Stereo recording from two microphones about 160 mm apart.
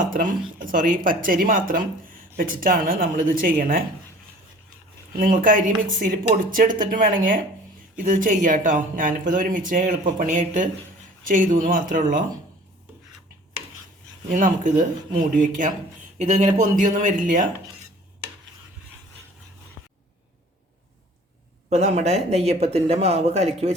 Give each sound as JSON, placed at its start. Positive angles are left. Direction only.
{"t": 0.1, "sound": "speech", "side_deg": -60}
{"t": 5.1, "sound": "speech", "side_deg": -60}
{"t": 14.3, "sound": "speech", "side_deg": -50}
{"t": 21.7, "sound": "speech", "side_deg": -45}